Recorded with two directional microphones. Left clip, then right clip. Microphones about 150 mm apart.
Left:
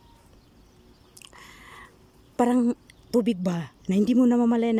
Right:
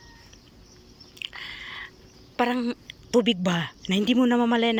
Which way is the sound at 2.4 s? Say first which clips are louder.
Left 2 dB; 40° left (ahead or behind).